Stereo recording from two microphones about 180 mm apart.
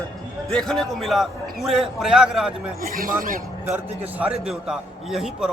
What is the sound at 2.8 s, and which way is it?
Speech, 55° right (ahead or behind).